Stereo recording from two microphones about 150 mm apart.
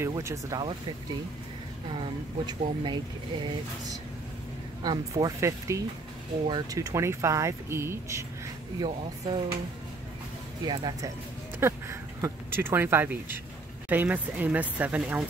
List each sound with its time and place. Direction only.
0.0 s speech: 20° right (ahead or behind)
2.0 s speech: 30° right (ahead or behind)
4.8 s speech: 20° right (ahead or behind)
8.7 s speech: 30° right (ahead or behind)
10.6 s speech: 30° right (ahead or behind)
11.6 s speech: 15° right (ahead or behind)